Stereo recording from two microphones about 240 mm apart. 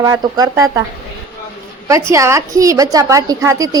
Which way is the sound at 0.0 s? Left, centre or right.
Centre.